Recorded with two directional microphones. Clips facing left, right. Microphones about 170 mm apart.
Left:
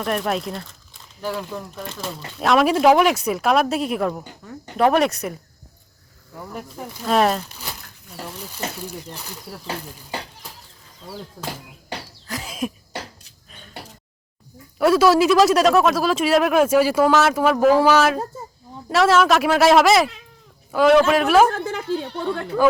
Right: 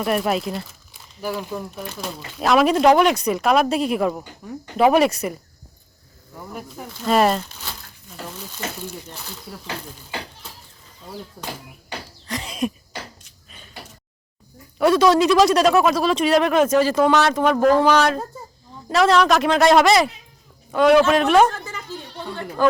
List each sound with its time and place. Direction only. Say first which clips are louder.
0.0 s speech: right 2 dB; 5° right (ahead or behind)
4.4 s speech: right 4 dB; 15° right (ahead or behind)
4.8 s speech: right 2 dB; centre (ahead or behind)
6.3 s speech: left 1 dB; 5° right (ahead or behind)
9.1 s speech: left 1 dB; 10° left (ahead or behind)
12.3 s a sound: right 2 dB; centre (ahead or behind)
14.8 s speech: even; 5° left (ahead or behind)
21.5 s speech: left 9 dB; 60° left (ahead or behind)